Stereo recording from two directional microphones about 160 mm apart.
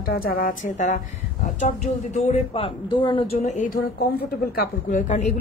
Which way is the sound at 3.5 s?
60° left (ahead or behind).